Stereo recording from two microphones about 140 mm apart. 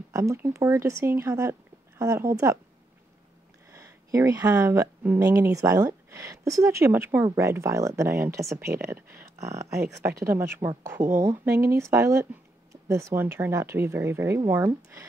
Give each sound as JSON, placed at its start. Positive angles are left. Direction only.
{"t": 0.1, "sound": "speech", "side_deg": -20}
{"t": 3.7, "sound": "speech", "side_deg": -20}